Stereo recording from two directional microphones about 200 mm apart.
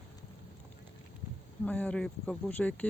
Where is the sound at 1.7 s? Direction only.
5° left (ahead or behind).